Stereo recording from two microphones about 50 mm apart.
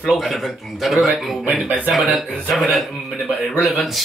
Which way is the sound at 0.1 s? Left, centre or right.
Centre.